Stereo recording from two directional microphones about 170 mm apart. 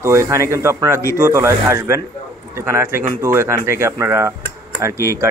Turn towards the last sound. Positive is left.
turn(degrees=-15)  # may be behind; listen again after turning